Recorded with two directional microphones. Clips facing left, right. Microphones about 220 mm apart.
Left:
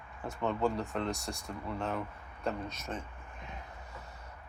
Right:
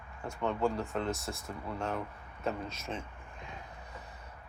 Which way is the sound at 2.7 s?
30° right (ahead or behind).